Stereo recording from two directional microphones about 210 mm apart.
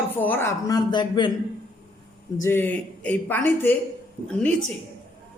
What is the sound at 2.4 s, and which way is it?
A man's voice, 10° left (ahead or behind).